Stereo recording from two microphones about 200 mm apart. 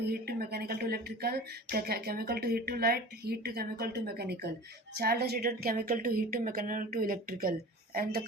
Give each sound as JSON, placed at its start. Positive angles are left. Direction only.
{"t": 0.1, "sound": "speech", "side_deg": -50}